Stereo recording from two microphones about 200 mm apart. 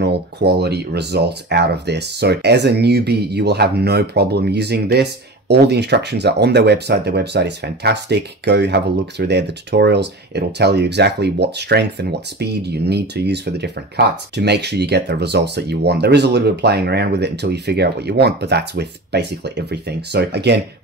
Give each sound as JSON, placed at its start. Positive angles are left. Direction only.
{"t": 0.0, "sound": "speech", "side_deg": -55}